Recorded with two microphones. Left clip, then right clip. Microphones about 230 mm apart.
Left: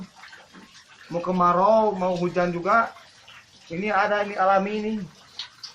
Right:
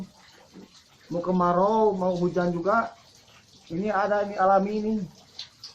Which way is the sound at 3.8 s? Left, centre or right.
Left.